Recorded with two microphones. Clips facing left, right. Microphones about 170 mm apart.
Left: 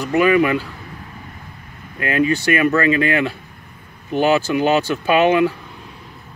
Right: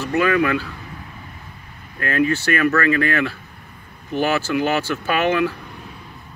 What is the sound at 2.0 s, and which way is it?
Speech, 15° left (ahead or behind).